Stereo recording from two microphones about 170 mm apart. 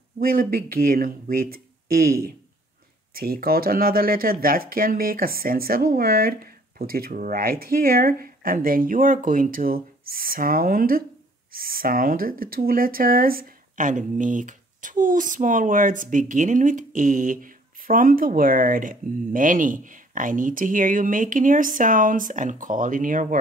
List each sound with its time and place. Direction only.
0.2 s speech: 60° right (ahead or behind)